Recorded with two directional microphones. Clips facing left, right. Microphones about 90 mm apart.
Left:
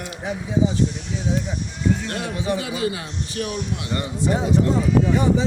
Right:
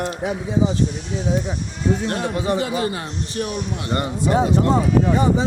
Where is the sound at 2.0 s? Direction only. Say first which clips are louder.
Right 4 dB; 40° right (ahead or behind).